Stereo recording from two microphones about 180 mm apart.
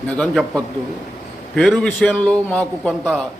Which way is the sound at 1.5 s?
Centre (ahead or behind).